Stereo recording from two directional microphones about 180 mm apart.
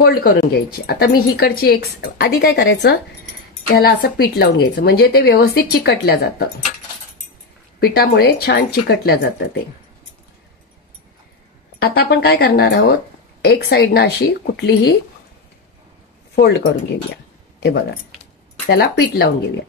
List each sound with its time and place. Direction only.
0.0 s speech: 55° left (ahead or behind); by 3.0 s 70° left (ahead or behind)
3.8 s speech: 60° left (ahead or behind)
7.8 s speech: 60° left (ahead or behind)
11.9 s speech: 60° left (ahead or behind)
16.3 s speech: 70° left (ahead or behind)
18.7 s speech: 60° left (ahead or behind)